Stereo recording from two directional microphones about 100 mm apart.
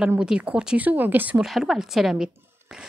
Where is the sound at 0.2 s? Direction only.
10° right (ahead or behind).